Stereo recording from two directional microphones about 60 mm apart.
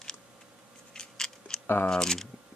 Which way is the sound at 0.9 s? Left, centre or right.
Centre.